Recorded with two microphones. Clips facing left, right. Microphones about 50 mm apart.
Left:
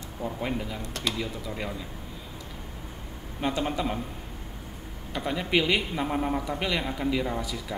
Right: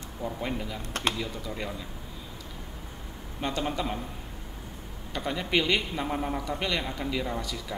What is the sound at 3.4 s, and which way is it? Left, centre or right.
Speech, centre.